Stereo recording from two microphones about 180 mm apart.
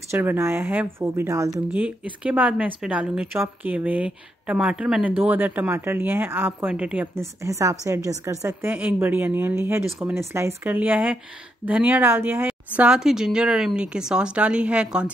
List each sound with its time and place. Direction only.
0.1 s a woman's voice: 15° right (ahead or behind)